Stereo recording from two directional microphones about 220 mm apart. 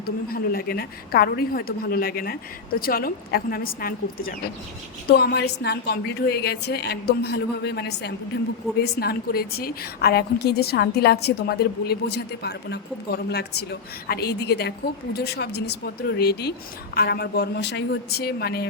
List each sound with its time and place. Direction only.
0.0 s a woman's voice: 45° left (ahead or behind)